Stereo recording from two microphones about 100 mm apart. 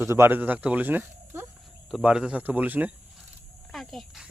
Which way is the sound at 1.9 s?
10° right (ahead or behind).